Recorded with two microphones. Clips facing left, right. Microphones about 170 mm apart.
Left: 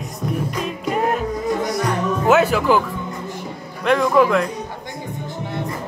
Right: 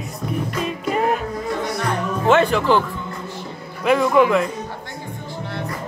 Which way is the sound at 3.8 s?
5° right (ahead or behind).